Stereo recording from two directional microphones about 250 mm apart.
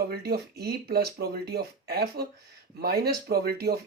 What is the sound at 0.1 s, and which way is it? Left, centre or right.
Speech, right.